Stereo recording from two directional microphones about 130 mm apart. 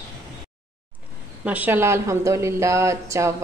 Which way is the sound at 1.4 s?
10° right (ahead or behind).